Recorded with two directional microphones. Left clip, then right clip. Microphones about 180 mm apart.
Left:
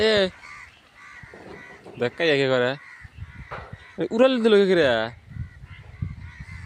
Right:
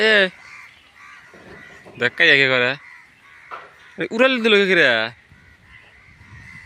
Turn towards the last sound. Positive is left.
turn(degrees=15)  # may be behind; listen again after turning